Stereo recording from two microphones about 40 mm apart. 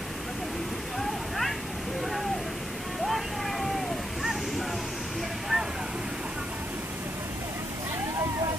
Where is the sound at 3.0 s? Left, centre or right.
Centre.